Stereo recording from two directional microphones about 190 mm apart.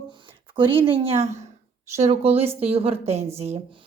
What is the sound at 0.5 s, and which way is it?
A woman's voice, 25° right (ahead or behind).